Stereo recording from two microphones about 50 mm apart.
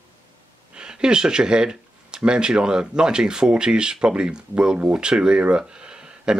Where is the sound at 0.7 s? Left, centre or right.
Centre.